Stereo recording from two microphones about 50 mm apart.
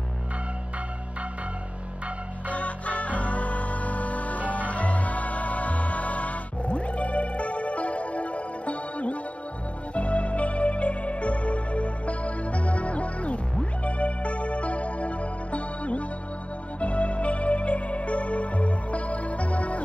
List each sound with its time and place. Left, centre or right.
2.5 s music: left